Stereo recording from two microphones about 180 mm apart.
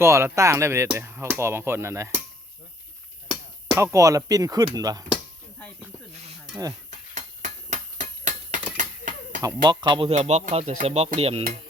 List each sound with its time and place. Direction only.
0.0 s speech: 15° right (ahead or behind)
3.8 s speech: 15° right (ahead or behind)
7.1 s a sound: 40° right (ahead or behind)
9.4 s speech: 20° right (ahead or behind)